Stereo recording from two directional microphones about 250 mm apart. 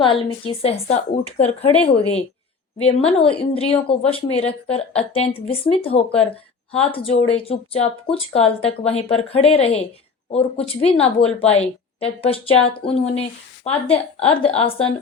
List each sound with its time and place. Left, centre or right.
0.0 s speech: centre